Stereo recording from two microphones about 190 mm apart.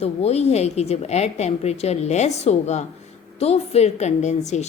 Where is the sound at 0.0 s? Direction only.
35° left (ahead or behind).